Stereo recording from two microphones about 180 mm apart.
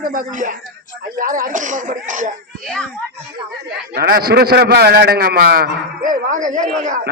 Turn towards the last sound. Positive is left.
turn(degrees=-45)  # may be behind; listen again after turning